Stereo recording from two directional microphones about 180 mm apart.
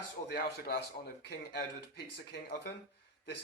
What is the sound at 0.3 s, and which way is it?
Speech, 65° left (ahead or behind).